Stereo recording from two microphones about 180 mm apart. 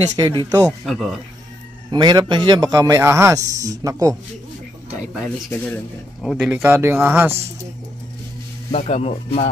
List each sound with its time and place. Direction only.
0.1 s a man's voice: 25° right (ahead or behind)
0.8 s speech: centre (ahead or behind)
1.9 s a man's voice: 25° right (ahead or behind)
5.1 s speech: centre (ahead or behind)
8.7 s speech: 35° left (ahead or behind)